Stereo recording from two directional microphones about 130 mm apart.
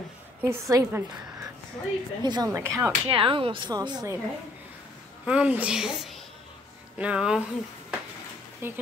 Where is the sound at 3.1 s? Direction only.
45° right (ahead or behind).